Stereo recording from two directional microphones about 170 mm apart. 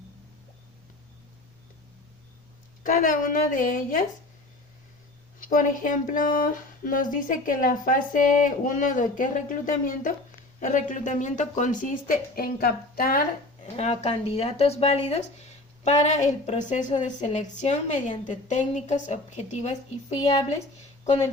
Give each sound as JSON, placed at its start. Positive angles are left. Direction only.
{"t": 2.8, "sound": "speech", "side_deg": 50}
{"t": 5.4, "sound": "speech", "side_deg": 50}
{"t": 13.7, "sound": "a woman's voice", "side_deg": 40}
{"t": 20.1, "sound": "speech", "side_deg": 25}